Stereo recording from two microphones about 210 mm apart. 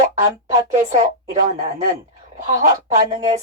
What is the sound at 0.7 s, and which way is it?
Speech, 35° right (ahead or behind).